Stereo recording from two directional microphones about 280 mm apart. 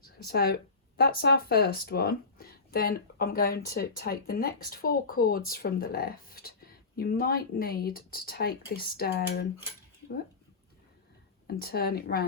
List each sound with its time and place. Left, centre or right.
0.0 s speech: left
11.4 s speech: left